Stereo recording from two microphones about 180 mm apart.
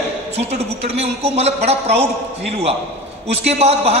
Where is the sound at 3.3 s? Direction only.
35° right (ahead or behind).